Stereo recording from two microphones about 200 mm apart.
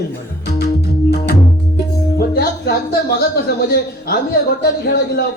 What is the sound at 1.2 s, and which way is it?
Music, 55° left (ahead or behind).